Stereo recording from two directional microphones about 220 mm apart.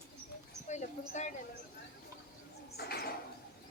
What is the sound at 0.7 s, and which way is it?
Speech, 35° left (ahead or behind).